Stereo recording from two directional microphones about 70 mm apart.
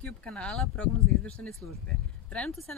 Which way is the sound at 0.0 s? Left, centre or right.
Centre.